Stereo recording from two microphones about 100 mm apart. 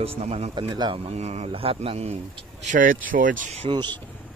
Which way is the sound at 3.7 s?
50° right (ahead or behind).